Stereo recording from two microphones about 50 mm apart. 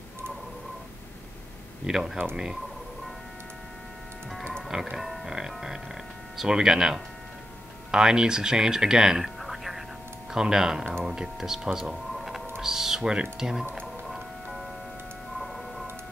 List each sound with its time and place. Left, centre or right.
1.9 s speech: centre
4.9 s speech: centre
9.4 s whispering: centre
10.3 s speech: centre
11.9 s a sound: centre
12.6 s speech: centre
14.0 s music: centre
15.3 s a sound: centre